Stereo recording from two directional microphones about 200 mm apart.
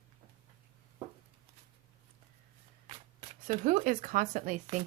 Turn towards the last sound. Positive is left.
turn(degrees=-40)  # may be behind; listen again after turning